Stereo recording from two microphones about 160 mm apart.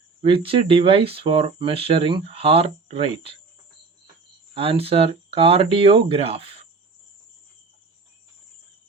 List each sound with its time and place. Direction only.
0.2 s speech: 35° right (ahead or behind)
4.8 s speech: 35° right (ahead or behind)